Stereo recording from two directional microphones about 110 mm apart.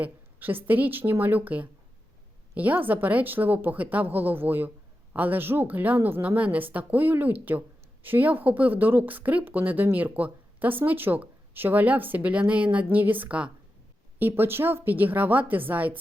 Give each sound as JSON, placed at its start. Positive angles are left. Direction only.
{"t": 0.0, "sound": "speech", "side_deg": -15}